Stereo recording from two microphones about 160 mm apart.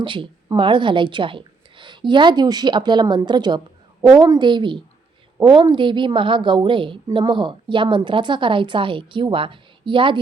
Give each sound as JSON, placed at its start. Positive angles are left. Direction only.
{"t": 0.0, "sound": "a woman's voice", "side_deg": -30}